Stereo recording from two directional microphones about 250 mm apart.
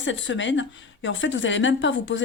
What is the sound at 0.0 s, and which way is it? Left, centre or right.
Speech, left.